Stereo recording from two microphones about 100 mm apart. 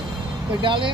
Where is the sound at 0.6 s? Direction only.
55° right (ahead or behind).